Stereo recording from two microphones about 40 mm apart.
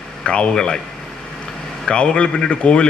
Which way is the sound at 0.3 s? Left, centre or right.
Left.